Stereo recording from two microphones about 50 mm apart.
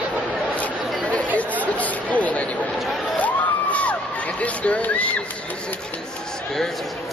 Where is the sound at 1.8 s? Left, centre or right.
Left.